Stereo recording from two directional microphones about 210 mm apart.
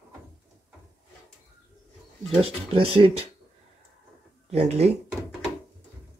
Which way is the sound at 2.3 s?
25° right (ahead or behind).